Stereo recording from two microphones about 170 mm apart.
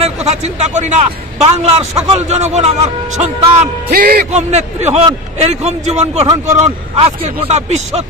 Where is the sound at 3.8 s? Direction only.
60° right (ahead or behind).